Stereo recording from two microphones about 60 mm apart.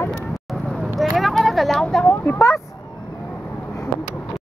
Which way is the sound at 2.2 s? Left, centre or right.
Left.